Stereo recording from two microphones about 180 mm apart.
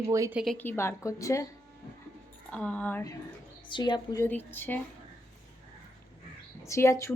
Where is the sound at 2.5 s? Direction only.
5° left (ahead or behind).